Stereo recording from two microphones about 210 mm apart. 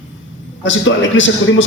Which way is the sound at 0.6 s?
60° left (ahead or behind).